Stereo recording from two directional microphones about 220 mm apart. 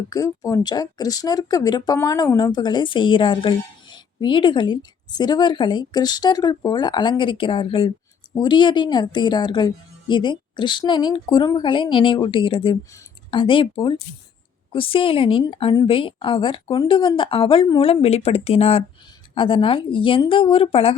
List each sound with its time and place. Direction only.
0.1 s speech: 15° left (ahead or behind)